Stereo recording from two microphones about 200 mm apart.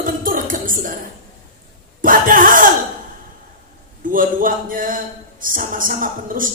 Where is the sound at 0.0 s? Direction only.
45° right (ahead or behind).